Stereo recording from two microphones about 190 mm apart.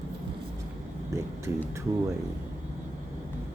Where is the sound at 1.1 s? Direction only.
15° right (ahead or behind).